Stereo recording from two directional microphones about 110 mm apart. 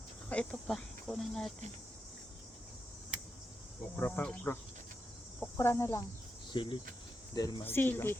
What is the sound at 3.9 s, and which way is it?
Speech, 10° left (ahead or behind).